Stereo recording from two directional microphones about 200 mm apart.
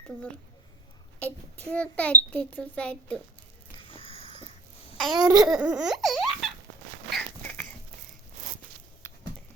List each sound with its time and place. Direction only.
0.1 s laughter: 5° left (ahead or behind)
1.2 s a child's voice: 5° left (ahead or behind)
3.8 s a sound: 25° left (ahead or behind)
4.9 s babbling: centre (ahead or behind)
5.4 s laughter: 5° right (ahead or behind)
7.1 s a sound: 5° left (ahead or behind)